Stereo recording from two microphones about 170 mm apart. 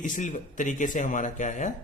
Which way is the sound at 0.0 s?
50° left (ahead or behind).